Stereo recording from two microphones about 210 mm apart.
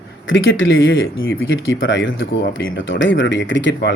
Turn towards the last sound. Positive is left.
turn(degrees=60)  # may be behind; listen again after turning